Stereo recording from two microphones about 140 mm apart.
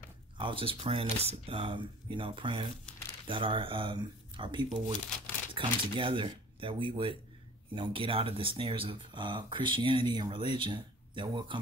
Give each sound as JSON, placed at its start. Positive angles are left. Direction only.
{"t": 0.4, "sound": "speech", "side_deg": -40}